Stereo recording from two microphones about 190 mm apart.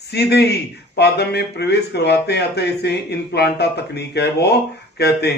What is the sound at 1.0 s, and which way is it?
Speech, 60° left (ahead or behind).